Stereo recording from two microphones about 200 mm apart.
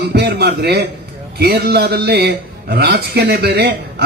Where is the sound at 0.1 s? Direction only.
55° right (ahead or behind).